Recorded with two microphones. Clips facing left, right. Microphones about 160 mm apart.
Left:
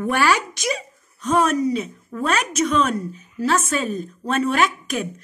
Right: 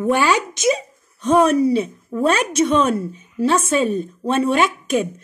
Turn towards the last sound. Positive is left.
turn(degrees=-25)  # may be behind; listen again after turning